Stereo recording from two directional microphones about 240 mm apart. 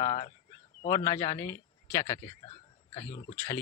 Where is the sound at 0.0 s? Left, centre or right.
Left.